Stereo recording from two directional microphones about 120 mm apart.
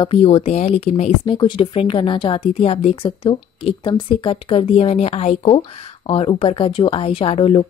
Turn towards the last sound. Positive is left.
turn(degrees=50)  # may be behind; listen again after turning